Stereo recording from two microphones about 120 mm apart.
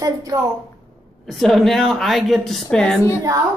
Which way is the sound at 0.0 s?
30° right (ahead or behind).